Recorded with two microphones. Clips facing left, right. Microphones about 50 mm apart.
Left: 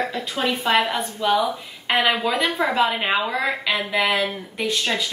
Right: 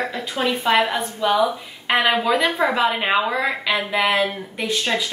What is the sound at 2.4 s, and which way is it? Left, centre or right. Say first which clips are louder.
Speech: right 2 dB; centre.